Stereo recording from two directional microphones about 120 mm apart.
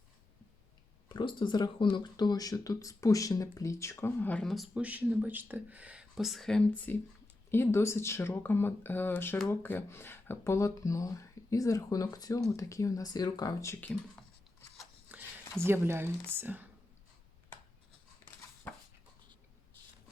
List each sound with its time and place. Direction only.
1.0 s speech: 40° left (ahead or behind); by 4.8 s centre (ahead or behind)
4.8 s speech: 10° right (ahead or behind); by 13.7 s 30° left (ahead or behind)
15.1 s a sound: 15° right (ahead or behind)
15.6 s speech: 20° right (ahead or behind)
18.7 s dog: 15° left (ahead or behind)